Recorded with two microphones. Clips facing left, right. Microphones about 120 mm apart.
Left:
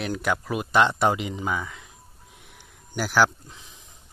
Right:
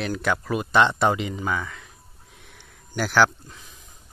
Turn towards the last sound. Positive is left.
turn(degrees=5)  # may be behind; listen again after turning